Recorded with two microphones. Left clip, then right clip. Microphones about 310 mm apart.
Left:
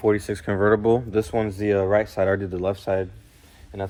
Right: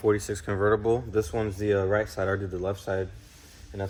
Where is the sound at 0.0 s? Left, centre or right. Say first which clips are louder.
Left 4 dB; centre.